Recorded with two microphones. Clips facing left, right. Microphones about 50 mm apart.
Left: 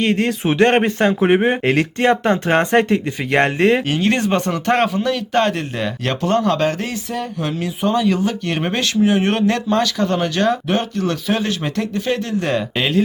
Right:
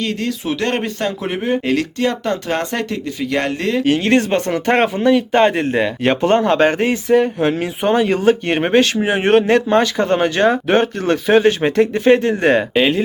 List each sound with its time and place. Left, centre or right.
0.0 s speech: left
3.8 s speech: centre; by 7.7 s right
7.8 s speech: right
8.4 s speech: right
12.7 s speech: centre